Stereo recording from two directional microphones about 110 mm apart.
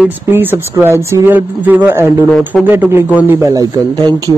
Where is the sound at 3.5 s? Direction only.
35° right (ahead or behind).